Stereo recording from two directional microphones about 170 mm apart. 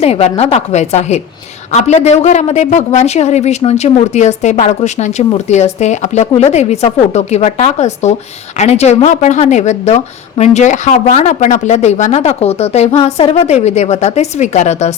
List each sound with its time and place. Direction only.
0.0 s a man's voice: 35° left (ahead or behind)